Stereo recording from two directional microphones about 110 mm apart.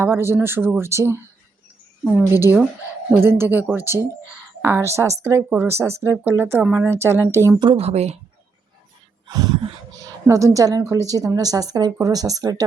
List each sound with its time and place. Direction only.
0.0 s speech: 25° right (ahead or behind)
7.8 s speech: 75° right (ahead or behind)
9.2 s a sound: 35° right (ahead or behind)
10.0 s a woman's voice: 30° right (ahead or behind)